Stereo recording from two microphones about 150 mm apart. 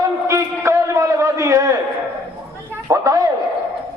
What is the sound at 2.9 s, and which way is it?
Speech, 20° right (ahead or behind).